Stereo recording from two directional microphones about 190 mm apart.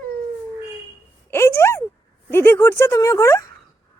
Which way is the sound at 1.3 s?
15° left (ahead or behind).